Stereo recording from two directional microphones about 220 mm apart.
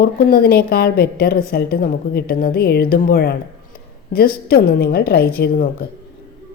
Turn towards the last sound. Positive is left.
turn(degrees=40)  # may be behind; listen again after turning